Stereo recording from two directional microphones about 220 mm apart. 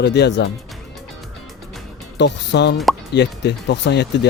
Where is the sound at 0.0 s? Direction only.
50° left (ahead or behind).